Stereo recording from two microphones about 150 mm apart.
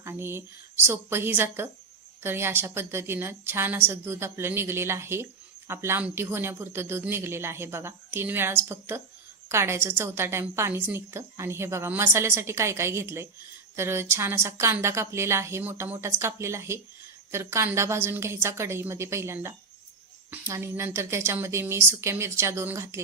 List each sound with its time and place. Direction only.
0.0 s a woman's voice: 15° right (ahead or behind)